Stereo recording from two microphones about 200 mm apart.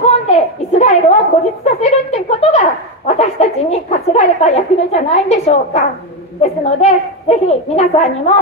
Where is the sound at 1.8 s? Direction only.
30° left (ahead or behind).